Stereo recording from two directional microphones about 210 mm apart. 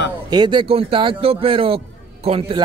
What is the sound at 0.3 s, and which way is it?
A man's voice, 20° right (ahead or behind).